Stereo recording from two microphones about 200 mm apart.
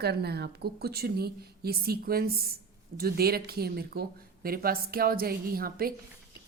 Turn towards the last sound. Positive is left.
turn(degrees=-45)  # may be behind; listen again after turning